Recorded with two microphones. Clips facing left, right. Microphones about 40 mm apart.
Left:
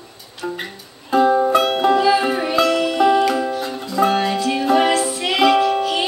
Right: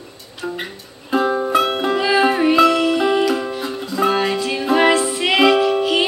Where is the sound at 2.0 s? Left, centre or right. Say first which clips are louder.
Even; right.